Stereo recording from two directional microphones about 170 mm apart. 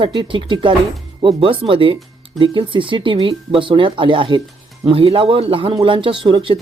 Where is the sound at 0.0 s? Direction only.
30° right (ahead or behind).